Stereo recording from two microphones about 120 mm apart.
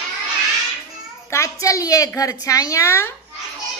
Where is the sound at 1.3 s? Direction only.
25° left (ahead or behind).